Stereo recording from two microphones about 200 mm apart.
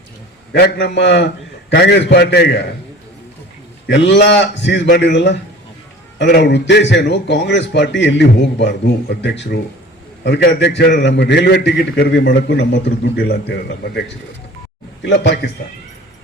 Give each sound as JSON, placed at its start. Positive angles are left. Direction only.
{"t": 0.5, "sound": "a man's voice", "side_deg": 60}
{"t": 3.8, "sound": "a man's voice", "side_deg": 60}
{"t": 15.0, "sound": "a man's voice", "side_deg": 60}